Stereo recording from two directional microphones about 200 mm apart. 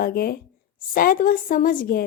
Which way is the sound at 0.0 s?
50° left (ahead or behind).